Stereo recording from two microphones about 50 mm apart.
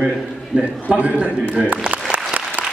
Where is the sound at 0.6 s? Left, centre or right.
Right.